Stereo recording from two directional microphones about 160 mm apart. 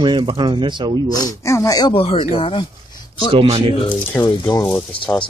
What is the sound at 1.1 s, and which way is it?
Speech, 20° left (ahead or behind).